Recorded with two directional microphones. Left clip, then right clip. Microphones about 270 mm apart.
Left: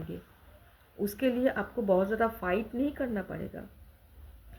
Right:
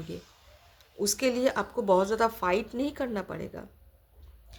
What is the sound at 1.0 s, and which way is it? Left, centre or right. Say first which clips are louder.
A woman's voice: right 2 dB; centre.